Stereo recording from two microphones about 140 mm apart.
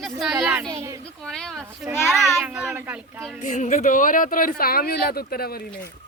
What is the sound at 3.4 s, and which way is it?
Speech, 60° left (ahead or behind).